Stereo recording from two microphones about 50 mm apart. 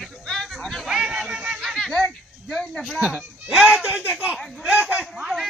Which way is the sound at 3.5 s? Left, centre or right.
Centre.